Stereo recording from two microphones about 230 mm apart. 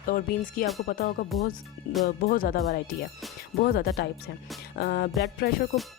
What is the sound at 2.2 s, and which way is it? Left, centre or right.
Speech, left.